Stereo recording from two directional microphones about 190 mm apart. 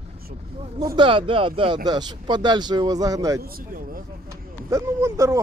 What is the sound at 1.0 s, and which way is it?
Speech, 25° right (ahead or behind).